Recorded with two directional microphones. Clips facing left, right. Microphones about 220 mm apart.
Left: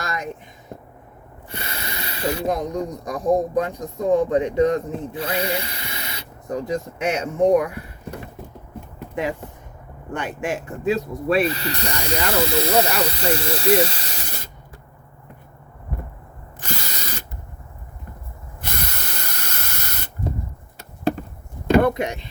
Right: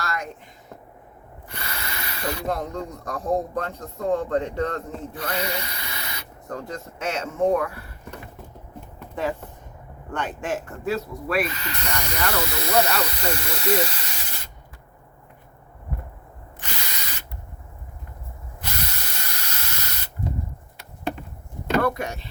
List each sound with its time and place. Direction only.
0.0 s a sound: 20° left (ahead or behind)
1.5 s speech: 25° left (ahead or behind)
5.1 s speech: 30° left (ahead or behind)
9.0 s a sound: 15° left (ahead or behind)
10.1 s speech: 10° left (ahead or behind)
11.1 s speech: 25° left (ahead or behind)
16.6 s ratchet: 40° left (ahead or behind)
18.6 s spray: 55° left (ahead or behind)
21.7 s a sound: 20° left (ahead or behind)